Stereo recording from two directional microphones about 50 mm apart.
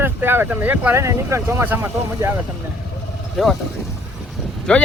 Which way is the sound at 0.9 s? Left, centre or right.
Right.